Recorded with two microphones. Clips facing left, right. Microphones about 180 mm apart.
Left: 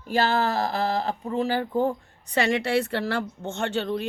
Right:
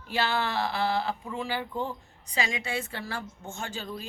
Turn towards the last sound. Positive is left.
turn(degrees=70)  # may be behind; listen again after turning